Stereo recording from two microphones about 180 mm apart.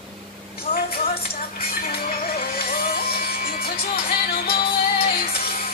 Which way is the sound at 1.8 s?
60° left (ahead or behind).